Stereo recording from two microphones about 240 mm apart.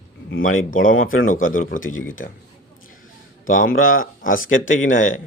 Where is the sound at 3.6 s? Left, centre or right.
Left.